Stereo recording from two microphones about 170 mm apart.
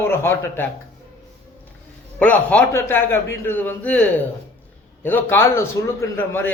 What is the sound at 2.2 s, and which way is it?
A man's voice, 10° left (ahead or behind).